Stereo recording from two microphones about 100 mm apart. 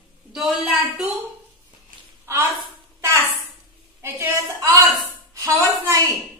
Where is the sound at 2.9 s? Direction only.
30° right (ahead or behind).